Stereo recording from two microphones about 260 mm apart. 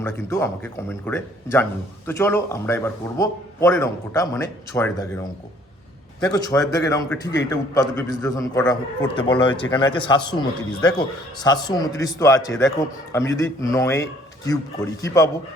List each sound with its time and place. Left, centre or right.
0.0 s a man's voice: centre